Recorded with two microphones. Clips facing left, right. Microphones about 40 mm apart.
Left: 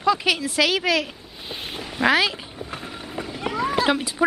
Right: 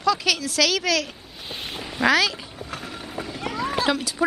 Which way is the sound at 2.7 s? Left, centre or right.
Centre.